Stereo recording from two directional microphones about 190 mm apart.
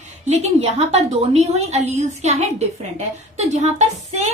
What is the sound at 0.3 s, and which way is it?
A woman's voice, 35° right (ahead or behind).